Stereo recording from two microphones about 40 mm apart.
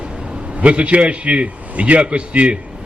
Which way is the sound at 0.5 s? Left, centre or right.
Right.